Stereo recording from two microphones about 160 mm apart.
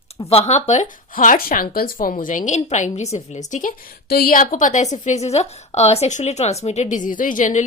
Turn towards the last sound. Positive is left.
turn(degrees=55)  # may be behind; listen again after turning